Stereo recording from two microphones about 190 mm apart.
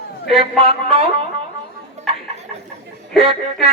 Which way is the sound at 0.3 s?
30° right (ahead or behind).